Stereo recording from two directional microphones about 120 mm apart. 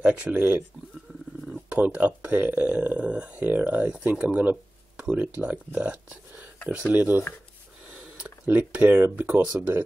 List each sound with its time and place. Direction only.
0.0 s speech: 10° right (ahead or behind)